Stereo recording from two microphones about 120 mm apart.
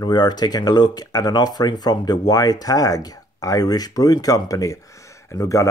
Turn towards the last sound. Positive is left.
turn(degrees=25)  # may be behind; listen again after turning